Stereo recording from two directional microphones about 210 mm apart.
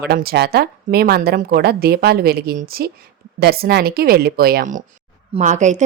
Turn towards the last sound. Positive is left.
turn(degrees=-35)  # may be behind; listen again after turning